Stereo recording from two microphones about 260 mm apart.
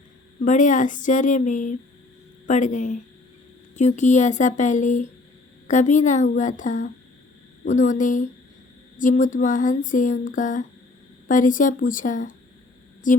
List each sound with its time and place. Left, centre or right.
0.4 s speech: left